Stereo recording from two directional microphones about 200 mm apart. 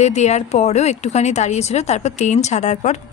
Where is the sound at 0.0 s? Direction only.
35° left (ahead or behind).